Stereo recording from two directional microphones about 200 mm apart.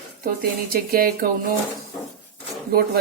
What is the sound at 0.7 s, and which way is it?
Speech, 45° right (ahead or behind).